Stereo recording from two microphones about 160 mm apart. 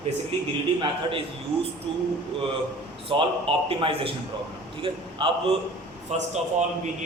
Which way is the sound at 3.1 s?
35° right (ahead or behind).